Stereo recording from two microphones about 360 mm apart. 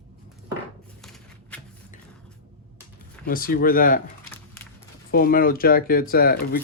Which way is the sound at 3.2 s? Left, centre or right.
Left.